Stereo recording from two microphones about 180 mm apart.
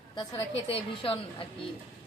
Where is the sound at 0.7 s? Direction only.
30° left (ahead or behind).